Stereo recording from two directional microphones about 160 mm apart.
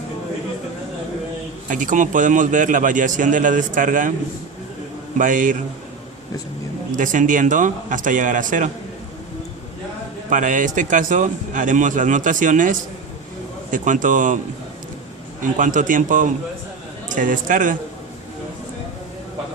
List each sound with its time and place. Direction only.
1.7 s a man's voice: 55° right (ahead or behind)
5.1 s a man's voice: 55° right (ahead or behind)
6.9 s a man's voice: 55° right (ahead or behind)
10.2 s a man's voice: 55° right (ahead or behind)
15.5 s a man's voice: 55° right (ahead or behind)